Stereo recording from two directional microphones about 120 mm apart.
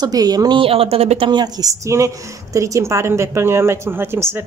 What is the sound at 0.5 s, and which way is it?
Speech, 50° right (ahead or behind).